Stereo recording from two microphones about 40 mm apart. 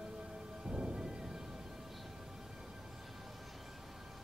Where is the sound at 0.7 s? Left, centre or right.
Centre.